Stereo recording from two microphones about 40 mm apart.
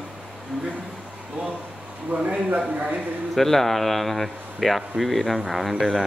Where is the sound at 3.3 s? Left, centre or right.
Centre.